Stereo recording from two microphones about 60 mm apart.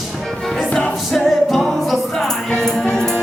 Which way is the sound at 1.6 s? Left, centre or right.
Centre.